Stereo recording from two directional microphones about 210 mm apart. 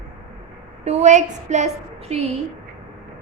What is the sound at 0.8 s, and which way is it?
A child's voice, 30° right (ahead or behind).